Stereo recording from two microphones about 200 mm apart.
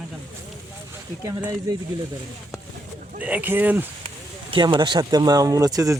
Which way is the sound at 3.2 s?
10° right (ahead or behind).